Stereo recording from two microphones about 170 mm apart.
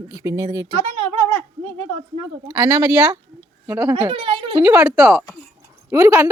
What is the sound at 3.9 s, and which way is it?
Speech, 30° right (ahead or behind).